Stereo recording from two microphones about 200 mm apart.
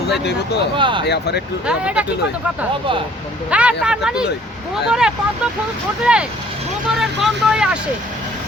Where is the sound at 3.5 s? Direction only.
5° right (ahead or behind).